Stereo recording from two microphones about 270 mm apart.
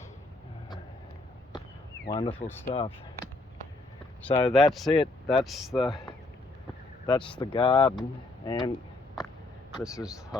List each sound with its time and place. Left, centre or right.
2.0 s speech: centre
4.3 s speech: centre
4.5 s speech: centre
7.1 s speech: centre
9.8 s speech: centre